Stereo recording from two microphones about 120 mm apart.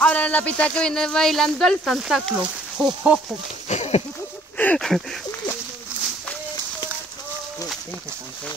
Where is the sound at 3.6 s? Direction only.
65° left (ahead or behind).